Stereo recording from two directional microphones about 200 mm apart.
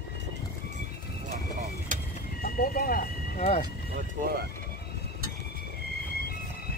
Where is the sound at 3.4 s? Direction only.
35° left (ahead or behind).